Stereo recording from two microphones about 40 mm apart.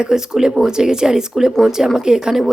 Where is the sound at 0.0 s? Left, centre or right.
Centre.